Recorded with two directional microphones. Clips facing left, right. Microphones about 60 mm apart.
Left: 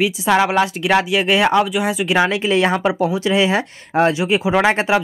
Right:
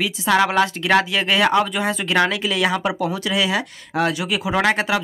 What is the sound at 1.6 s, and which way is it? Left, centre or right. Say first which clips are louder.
Speech: left 3 dB; centre.